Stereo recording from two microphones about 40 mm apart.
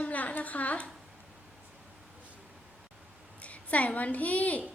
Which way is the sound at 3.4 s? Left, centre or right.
Left.